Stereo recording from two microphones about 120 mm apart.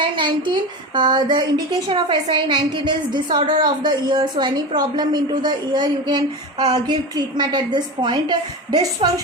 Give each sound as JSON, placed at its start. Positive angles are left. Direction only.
{"t": 0.0, "sound": "a woman's voice", "side_deg": -40}